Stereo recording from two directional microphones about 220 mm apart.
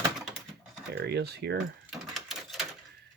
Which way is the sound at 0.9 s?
50° right (ahead or behind).